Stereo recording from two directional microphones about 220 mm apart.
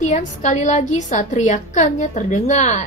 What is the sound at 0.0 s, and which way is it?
A woman's voice, 35° left (ahead or behind).